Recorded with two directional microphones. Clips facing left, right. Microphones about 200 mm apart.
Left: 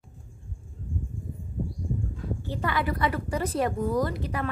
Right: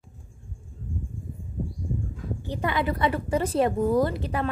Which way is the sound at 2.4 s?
20° right (ahead or behind).